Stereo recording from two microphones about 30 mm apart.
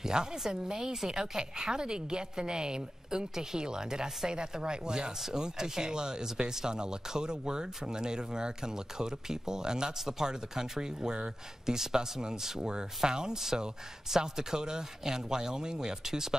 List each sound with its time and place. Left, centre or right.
0.0 s a woman's voice: right